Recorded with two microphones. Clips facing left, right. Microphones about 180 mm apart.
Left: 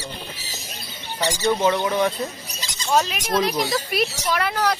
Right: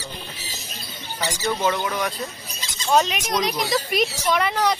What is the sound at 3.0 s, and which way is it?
Speech, 5° left (ahead or behind).